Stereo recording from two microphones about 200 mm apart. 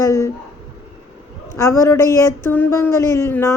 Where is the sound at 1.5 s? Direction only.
15° left (ahead or behind).